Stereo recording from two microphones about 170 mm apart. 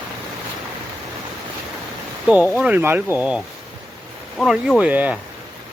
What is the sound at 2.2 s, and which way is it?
Speech, 10° right (ahead or behind).